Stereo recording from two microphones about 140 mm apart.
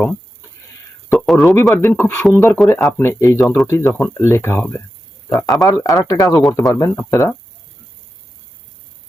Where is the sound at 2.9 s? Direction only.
15° left (ahead or behind).